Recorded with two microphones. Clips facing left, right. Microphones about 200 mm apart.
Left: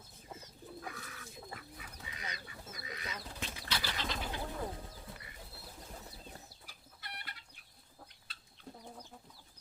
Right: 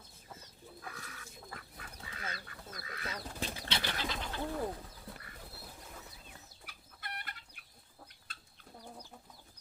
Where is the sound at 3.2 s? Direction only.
45° right (ahead or behind).